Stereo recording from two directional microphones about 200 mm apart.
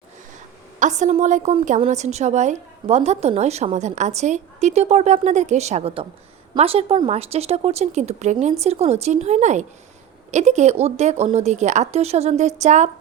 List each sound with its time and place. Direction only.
0.8 s a woman's voice: 40° right (ahead or behind)